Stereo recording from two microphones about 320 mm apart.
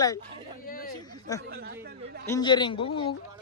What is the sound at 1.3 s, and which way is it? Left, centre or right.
Speech, centre.